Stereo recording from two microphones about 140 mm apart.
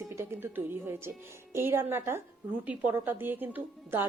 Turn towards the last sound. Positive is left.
turn(degrees=-15)  # may be behind; listen again after turning